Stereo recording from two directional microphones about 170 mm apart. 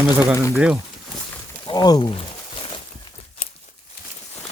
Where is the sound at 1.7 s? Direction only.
25° left (ahead or behind).